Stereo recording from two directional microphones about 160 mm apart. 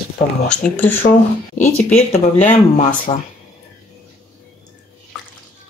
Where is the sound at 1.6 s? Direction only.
45° left (ahead or behind).